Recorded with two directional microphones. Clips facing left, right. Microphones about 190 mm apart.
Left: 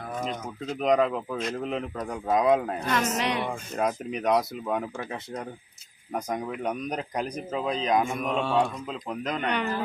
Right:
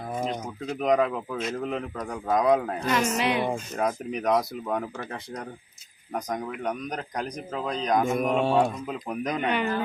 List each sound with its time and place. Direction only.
0.8 s speech: centre (ahead or behind)
8.2 s speech: 45° right (ahead or behind)
8.9 s speech: 15° right (ahead or behind)